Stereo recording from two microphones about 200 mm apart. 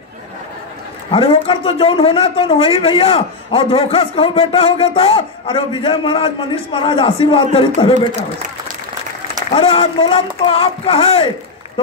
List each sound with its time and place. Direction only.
1.1 s a man's voice: 25° left (ahead or behind)
9.5 s a man's voice: 30° left (ahead or behind)